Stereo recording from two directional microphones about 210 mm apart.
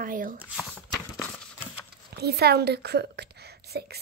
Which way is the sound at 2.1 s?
50° right (ahead or behind).